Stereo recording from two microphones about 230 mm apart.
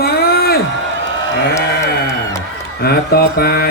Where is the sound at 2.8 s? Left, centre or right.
Left.